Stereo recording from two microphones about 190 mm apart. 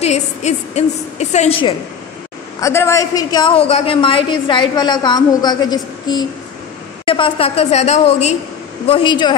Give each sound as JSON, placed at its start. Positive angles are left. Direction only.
{"t": 0.0, "sound": "a woman's voice", "side_deg": 35}
{"t": 2.6, "sound": "a woman's voice", "side_deg": 15}